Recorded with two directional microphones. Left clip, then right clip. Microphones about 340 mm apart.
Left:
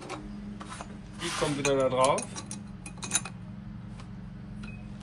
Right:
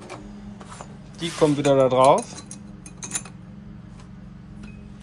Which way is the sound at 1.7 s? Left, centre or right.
Centre.